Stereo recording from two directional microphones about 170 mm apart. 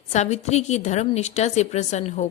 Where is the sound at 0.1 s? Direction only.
40° left (ahead or behind).